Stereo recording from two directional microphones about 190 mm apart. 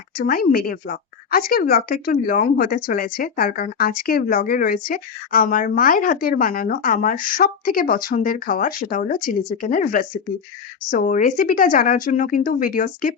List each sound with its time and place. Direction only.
0.2 s speech: 50° left (ahead or behind)